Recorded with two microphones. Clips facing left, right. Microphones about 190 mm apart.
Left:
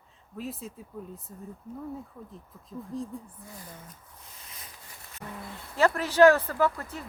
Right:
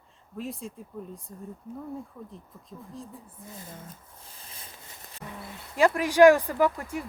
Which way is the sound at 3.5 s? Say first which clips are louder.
Right 2 dB; 25° right (ahead or behind).